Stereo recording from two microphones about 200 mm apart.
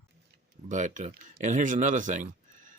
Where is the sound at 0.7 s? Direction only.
40° right (ahead or behind).